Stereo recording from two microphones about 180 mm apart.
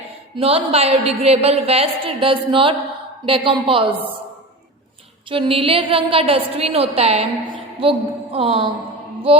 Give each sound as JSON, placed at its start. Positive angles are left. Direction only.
{"t": 0.3, "sound": "a woman's voice", "side_deg": -35}
{"t": 5.3, "sound": "a woman's voice", "side_deg": -30}